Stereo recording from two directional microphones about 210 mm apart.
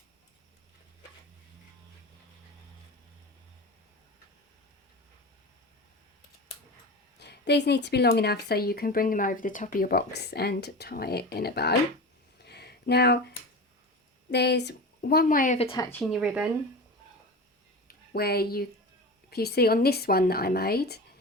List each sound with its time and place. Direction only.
7.2 s speech: 55° left (ahead or behind)
12.4 s a sound: 50° left (ahead or behind)
14.3 s speech: 55° left (ahead or behind)
15.5 s speech: 30° left (ahead or behind)
15.8 s speech: 10° left (ahead or behind)
16.2 s speech: 5° right (ahead or behind)
17.8 s speech: 50° left (ahead or behind)